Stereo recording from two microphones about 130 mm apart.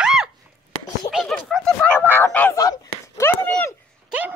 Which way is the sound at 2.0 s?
15° left (ahead or behind).